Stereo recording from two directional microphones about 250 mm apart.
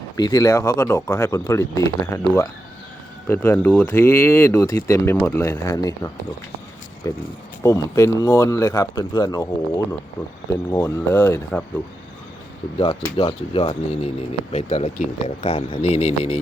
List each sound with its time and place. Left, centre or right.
0.2 s speech: centre
12.8 s speech: left